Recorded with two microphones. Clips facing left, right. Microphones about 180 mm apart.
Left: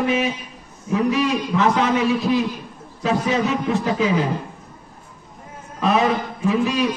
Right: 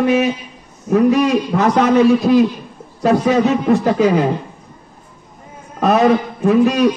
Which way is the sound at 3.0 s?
60° right (ahead or behind).